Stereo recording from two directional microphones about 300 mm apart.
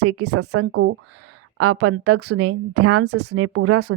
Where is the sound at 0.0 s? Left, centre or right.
Right.